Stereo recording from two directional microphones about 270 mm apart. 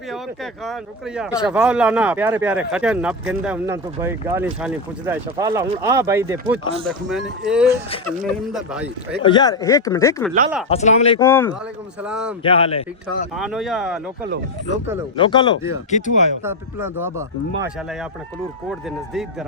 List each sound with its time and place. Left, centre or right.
0.6 s speech: centre
9.2 s speech: centre
10.7 s speech: left
11.2 s speech: centre
12.0 s speech: centre
12.4 s speech: centre
13.3 s speech: centre
15.1 s speech: centre
16.4 s speech: centre
18.7 s speech: centre